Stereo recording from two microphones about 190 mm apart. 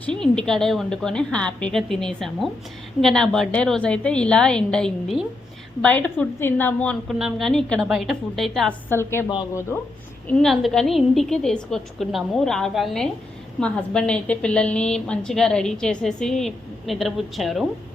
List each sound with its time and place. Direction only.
0.0 s a woman's voice: 5° left (ahead or behind)
8.9 s speech: 15° left (ahead or behind)
10.2 s a woman's voice: centre (ahead or behind)